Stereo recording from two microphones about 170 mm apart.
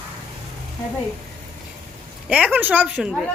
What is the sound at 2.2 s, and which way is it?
A woman's voice, 10° right (ahead or behind).